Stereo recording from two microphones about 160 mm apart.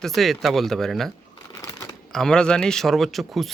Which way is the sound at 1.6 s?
20° left (ahead or behind).